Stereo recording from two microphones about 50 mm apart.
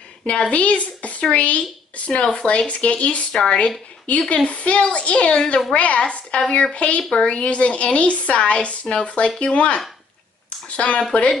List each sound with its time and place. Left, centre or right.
0.3 s speech: left
4.1 s speech: left
10.8 s speech: left